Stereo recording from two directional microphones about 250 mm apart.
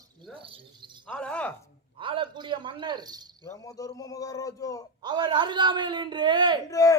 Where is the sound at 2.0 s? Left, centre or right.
Centre.